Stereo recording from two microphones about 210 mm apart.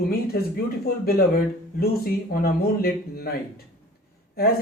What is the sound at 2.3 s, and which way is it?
Speech, 45° left (ahead or behind).